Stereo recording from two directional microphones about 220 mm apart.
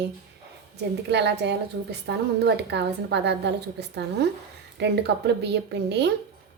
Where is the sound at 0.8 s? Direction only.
50° right (ahead or behind).